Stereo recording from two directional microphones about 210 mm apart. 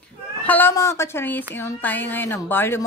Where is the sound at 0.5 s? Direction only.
10° left (ahead or behind).